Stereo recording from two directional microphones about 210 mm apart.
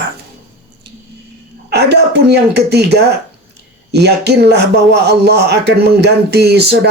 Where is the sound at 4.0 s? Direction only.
50° right (ahead or behind).